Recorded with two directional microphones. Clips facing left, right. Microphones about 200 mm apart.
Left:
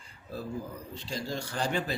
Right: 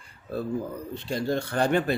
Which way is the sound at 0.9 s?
60° right (ahead or behind).